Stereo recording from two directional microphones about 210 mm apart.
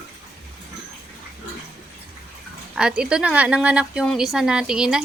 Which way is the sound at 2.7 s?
5° right (ahead or behind).